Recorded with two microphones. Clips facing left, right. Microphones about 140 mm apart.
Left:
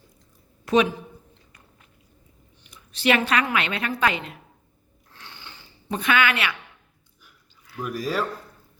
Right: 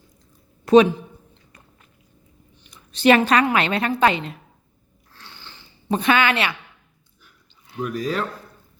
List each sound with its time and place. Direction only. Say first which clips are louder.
0.6 s a sound: right 7 dB; 30° right (ahead or behind)
2.6 s a woman's voice: right 6 dB; 35° right (ahead or behind)
5.9 s speech: right 4 dB; 30° right (ahead or behind)
7.9 s speech: right 1 dB; 5° left (ahead or behind)